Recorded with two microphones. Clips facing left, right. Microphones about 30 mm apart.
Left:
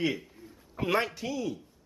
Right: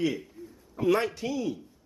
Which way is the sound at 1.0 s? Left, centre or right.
Centre.